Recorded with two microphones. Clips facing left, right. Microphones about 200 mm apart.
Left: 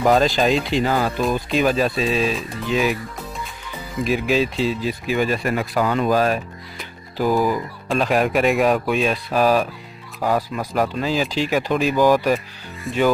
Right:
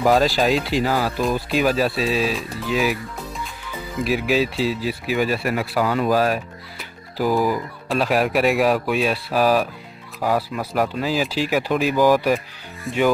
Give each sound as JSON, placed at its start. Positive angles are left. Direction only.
{"t": 0.0, "sound": "speech", "side_deg": -5}
{"t": 4.0, "sound": "speech", "side_deg": -10}